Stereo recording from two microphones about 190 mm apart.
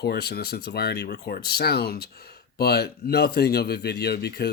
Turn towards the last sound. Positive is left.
turn(degrees=55)  # may be behind; listen again after turning